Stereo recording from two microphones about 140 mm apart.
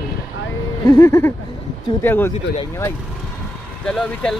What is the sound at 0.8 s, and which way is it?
Speech, 20° left (ahead or behind).